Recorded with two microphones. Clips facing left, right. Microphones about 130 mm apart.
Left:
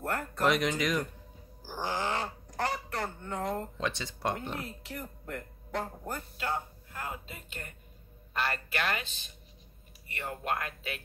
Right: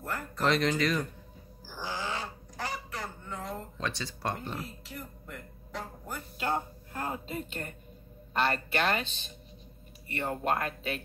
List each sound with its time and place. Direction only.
0.4 s speech: 15° left (ahead or behind)
1.7 s a sound: 50° left (ahead or behind)
3.7 s speech: 20° left (ahead or behind)
4.8 s speech: 60° left (ahead or behind)
6.4 s speech: 35° right (ahead or behind)